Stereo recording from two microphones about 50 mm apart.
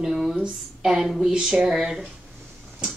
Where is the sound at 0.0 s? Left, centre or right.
Centre.